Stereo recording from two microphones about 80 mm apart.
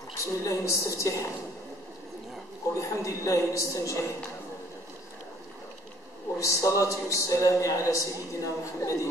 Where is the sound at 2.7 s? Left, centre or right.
Left.